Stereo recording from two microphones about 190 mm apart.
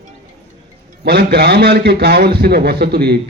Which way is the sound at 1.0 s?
55° right (ahead or behind).